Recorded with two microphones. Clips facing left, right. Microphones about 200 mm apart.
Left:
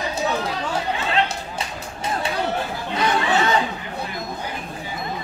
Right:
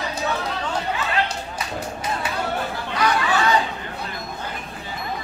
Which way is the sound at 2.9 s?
25° left (ahead or behind).